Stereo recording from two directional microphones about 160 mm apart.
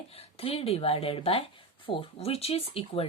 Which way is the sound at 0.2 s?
40° left (ahead or behind).